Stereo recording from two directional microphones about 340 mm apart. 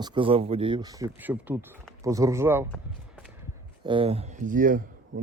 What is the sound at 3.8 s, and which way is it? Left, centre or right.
Speech, centre.